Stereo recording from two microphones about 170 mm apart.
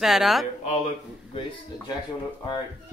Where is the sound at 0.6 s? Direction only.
40° left (ahead or behind).